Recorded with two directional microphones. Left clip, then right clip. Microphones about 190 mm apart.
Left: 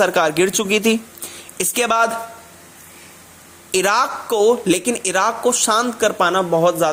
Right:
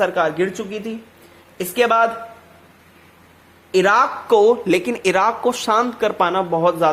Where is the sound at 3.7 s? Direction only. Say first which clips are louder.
Right 2 dB; 30° left (ahead or behind).